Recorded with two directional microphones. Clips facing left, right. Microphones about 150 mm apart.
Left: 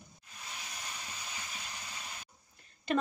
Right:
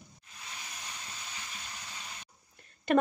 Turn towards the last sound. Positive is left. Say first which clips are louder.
# right 6 dB
turn(degrees=-60)  # may be behind; listen again after turning